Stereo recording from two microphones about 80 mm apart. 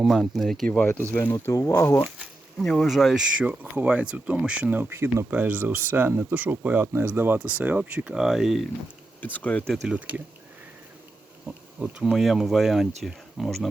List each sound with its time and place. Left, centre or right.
0.0 s speech: centre
1.1 s speech: left
1.5 s speech: left
2.0 s a sound: centre
2.6 s speech: centre
3.4 s speech: centre
8.1 s speech: centre
9.2 s speech: centre
9.8 s speech: centre
11.4 s speech: centre